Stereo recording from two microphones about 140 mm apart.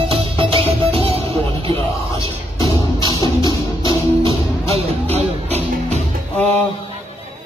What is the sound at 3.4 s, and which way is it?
Music, 40° right (ahead or behind).